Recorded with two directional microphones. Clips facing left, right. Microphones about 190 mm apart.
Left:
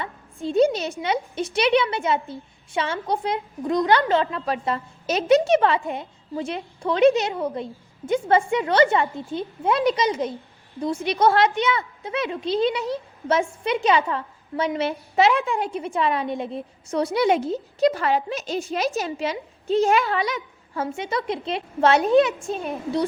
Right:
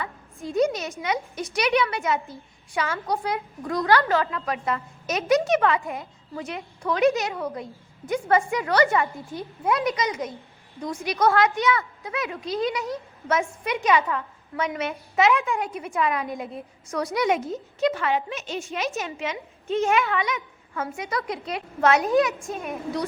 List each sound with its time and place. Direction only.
0.4 s a woman's voice: 30° left (ahead or behind)